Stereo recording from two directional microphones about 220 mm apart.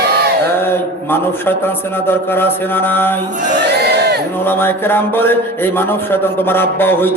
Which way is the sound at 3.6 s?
50° right (ahead or behind).